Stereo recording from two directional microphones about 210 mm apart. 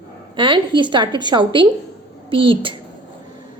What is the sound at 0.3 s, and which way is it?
A woman's voice, 25° right (ahead or behind).